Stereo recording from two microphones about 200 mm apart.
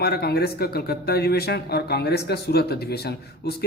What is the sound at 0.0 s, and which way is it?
Speech, 50° left (ahead or behind).